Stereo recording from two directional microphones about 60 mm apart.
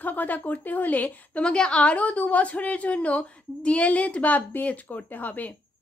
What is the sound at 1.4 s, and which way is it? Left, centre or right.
A woman's voice, centre.